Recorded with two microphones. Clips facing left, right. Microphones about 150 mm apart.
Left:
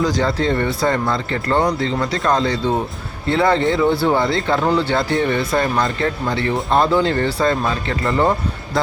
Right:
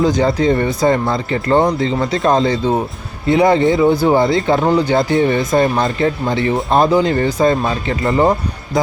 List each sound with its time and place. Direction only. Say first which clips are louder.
0.0 s speech: right 4 dB; 20° right (ahead or behind)